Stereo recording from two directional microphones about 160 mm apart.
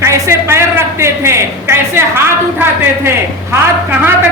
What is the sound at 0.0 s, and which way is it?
A woman's voice, 15° right (ahead or behind).